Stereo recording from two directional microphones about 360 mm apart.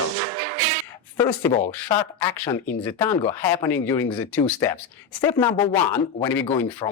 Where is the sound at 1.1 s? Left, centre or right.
Centre.